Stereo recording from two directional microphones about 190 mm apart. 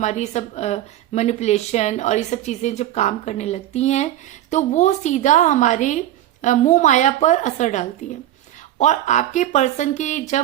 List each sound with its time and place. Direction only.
0.0 s speech: 40° left (ahead or behind)